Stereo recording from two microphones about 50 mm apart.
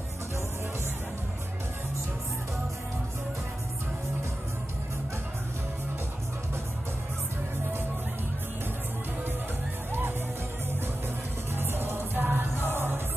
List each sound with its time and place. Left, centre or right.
11.5 s music: right